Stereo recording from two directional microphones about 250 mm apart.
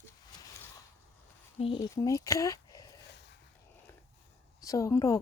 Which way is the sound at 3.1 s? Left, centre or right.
Left.